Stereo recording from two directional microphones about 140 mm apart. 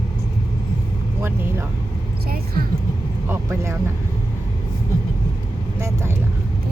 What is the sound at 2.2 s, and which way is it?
Vehicle, 90° right.